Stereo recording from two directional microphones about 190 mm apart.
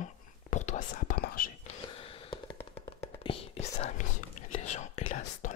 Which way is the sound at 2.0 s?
30° left (ahead or behind).